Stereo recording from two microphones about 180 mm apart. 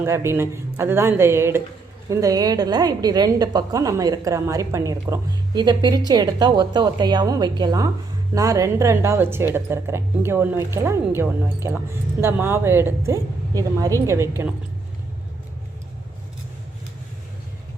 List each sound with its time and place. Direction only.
0.0 s a woman's voice: 15° right (ahead or behind)